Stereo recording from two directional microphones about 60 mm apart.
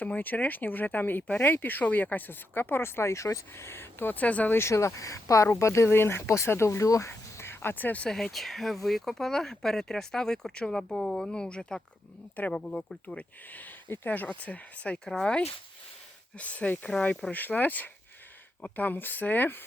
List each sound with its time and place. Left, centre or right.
0.0 s speech: left
4.5 s speech: left
5.5 s speech: left
7.1 s a sound: left
8.1 s speech: centre
13.5 s speech: left
15.0 s speech: centre
16.4 s speech: left